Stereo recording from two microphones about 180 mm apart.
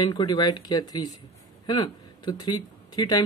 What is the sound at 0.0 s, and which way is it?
Speech, 25° left (ahead or behind).